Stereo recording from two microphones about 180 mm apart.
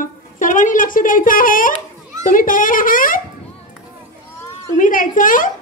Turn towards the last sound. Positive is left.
turn(degrees=50)  # may be behind; listen again after turning